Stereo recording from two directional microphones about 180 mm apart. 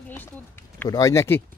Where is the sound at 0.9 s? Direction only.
20° left (ahead or behind).